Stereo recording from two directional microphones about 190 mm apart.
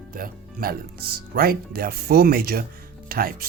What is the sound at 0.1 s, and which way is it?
Speech, 50° right (ahead or behind).